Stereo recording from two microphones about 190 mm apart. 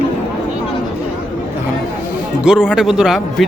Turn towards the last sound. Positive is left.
turn(degrees=0)  # may be behind; listen again after turning